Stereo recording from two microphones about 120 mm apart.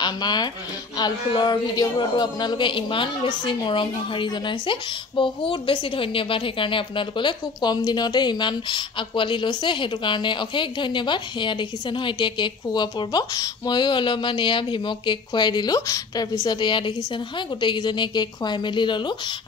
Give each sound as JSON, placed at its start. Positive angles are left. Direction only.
{"t": 0.0, "sound": "speech", "side_deg": 35}